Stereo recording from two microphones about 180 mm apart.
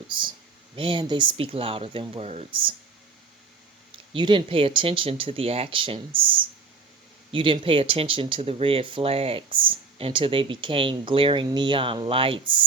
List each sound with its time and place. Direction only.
0.1 s speech: 25° right (ahead or behind)
4.1 s speech: 25° right (ahead or behind)